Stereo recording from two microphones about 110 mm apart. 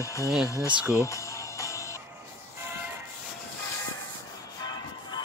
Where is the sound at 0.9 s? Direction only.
25° left (ahead or behind).